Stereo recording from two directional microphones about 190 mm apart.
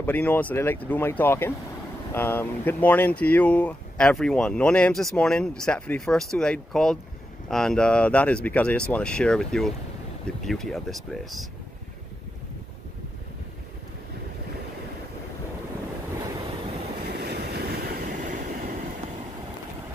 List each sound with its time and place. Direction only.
0.0 s speech: 10° left (ahead or behind)
17.2 s train: 60° right (ahead or behind)